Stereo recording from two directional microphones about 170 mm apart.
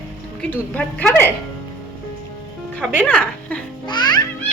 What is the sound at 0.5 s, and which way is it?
Speech, 10° left (ahead or behind).